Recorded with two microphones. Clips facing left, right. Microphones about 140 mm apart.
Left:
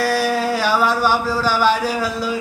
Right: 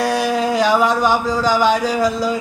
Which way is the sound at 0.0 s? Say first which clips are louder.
Right 1 dB; 20° right (ahead or behind).